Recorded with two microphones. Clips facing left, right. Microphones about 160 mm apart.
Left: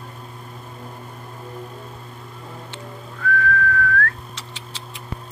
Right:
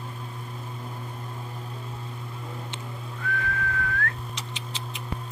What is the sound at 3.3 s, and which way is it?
Whistling, 20° right (ahead or behind).